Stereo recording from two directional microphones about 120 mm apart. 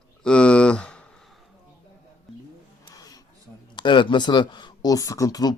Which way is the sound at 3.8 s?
40° left (ahead or behind).